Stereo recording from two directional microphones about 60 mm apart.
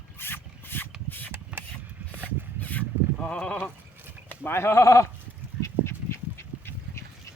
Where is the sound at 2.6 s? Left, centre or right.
Left.